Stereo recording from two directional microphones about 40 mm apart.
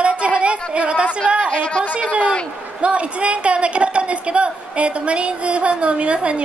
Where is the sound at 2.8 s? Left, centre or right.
Right.